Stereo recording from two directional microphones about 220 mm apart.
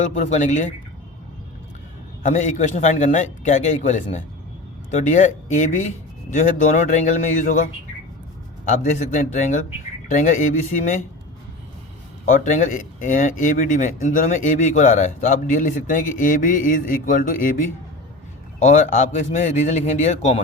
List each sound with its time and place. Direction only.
0.1 s speech: 30° left (ahead or behind)
2.2 s speech: 35° left (ahead or behind)
8.6 s speech: 40° left (ahead or behind)
12.2 s speech: 35° left (ahead or behind)